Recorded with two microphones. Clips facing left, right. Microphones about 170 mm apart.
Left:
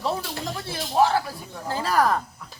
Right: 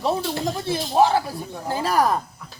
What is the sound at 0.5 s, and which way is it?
Speech, 20° right (ahead or behind).